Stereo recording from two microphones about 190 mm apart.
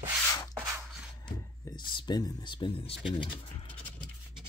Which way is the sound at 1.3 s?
25° left (ahead or behind).